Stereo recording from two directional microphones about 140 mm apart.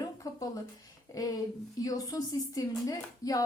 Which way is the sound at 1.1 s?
25° left (ahead or behind).